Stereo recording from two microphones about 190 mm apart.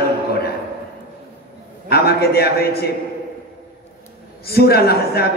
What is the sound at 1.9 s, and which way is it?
A man's voice, 55° left (ahead or behind).